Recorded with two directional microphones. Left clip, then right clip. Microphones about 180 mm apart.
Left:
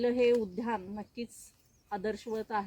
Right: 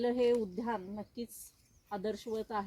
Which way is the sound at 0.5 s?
10° right (ahead or behind).